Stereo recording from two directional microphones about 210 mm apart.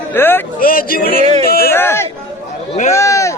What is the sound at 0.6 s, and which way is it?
Speech, 45° left (ahead or behind).